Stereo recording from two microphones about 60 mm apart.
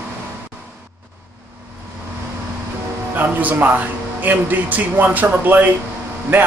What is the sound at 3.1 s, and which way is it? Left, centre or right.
Speech, right.